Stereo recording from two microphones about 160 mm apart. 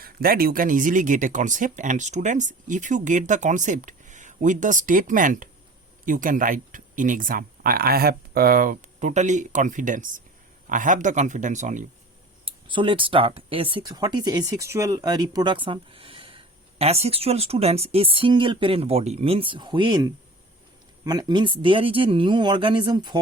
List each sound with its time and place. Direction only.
0.0 s speech: 65° right (ahead or behind); by 11.9 s 50° right (ahead or behind)
12.5 s speech: 30° right (ahead or behind)